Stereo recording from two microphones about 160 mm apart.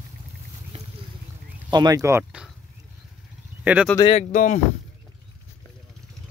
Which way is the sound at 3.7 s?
10° right (ahead or behind).